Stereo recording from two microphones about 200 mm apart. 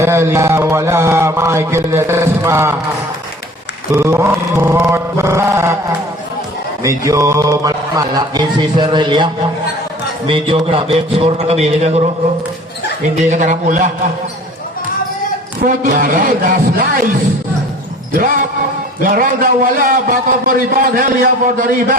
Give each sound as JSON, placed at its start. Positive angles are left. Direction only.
{"t": 0.0, "sound": "mantra", "side_deg": -10}
{"t": 3.9, "sound": "mantra", "side_deg": -15}
{"t": 6.8, "sound": "mantra", "side_deg": -15}
{"t": 10.2, "sound": "a man's voice", "side_deg": -25}
{"t": 13.3, "sound": "a man's voice", "side_deg": -40}
{"t": 15.6, "sound": "a man's voice", "side_deg": -40}
{"t": 19.0, "sound": "a man's voice", "side_deg": -45}